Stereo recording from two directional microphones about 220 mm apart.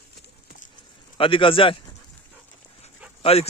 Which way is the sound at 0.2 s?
40° left (ahead or behind).